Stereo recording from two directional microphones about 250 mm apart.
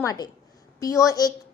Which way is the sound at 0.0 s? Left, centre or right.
Centre.